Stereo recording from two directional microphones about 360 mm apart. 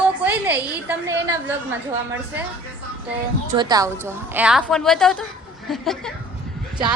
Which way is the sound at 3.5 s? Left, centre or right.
Centre.